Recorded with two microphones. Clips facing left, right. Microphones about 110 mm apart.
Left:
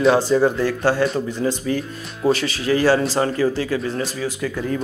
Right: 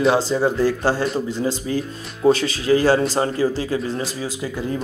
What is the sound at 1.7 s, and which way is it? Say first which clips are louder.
Speech: left 1 dB; 25° right (ahead or behind).